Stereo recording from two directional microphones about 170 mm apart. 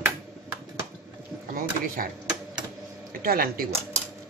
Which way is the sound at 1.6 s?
55° right (ahead or behind).